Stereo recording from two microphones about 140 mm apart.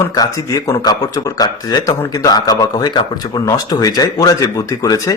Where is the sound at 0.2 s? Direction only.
30° left (ahead or behind).